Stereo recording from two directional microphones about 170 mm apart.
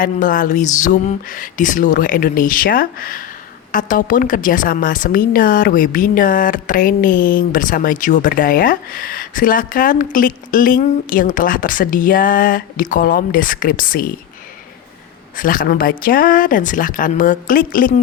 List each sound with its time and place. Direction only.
0.0 s a woman's voice: 55° left (ahead or behind)
15.4 s speech: 55° left (ahead or behind)